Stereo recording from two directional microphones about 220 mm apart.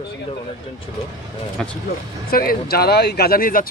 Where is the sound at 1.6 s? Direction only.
Centre (ahead or behind).